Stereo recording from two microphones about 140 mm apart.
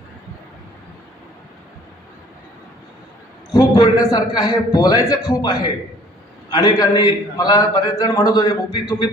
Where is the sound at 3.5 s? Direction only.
30° left (ahead or behind).